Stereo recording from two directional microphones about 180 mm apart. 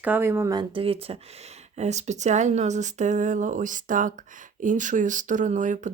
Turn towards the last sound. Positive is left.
turn(degrees=-45)  # may be behind; listen again after turning